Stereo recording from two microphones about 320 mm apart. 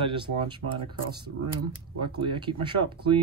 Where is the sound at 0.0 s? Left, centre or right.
Centre.